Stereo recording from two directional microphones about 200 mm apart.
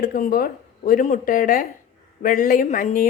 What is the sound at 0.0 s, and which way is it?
A woman's voice, 45° left (ahead or behind).